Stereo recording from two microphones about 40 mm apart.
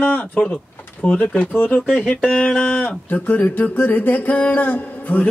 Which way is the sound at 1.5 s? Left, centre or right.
Left.